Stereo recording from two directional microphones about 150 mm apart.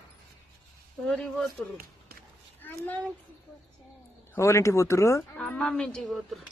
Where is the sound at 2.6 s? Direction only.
15° left (ahead or behind).